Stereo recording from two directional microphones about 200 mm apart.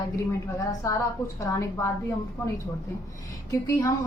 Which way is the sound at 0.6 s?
15° left (ahead or behind).